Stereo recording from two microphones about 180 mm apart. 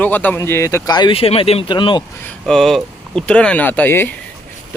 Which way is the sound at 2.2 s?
5° left (ahead or behind).